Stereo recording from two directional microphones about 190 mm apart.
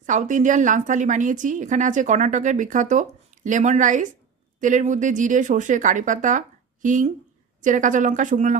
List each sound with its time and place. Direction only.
0.0 s a woman's voice: 40° right (ahead or behind)